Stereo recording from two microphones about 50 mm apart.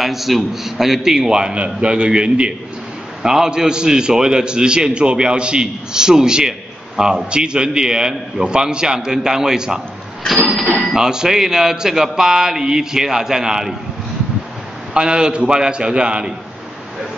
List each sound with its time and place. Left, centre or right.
0.0 s a man's voice: centre
11.0 s a man's voice: centre
15.0 s a man's voice: centre